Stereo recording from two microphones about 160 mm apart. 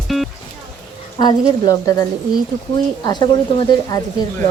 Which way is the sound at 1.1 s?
25° left (ahead or behind).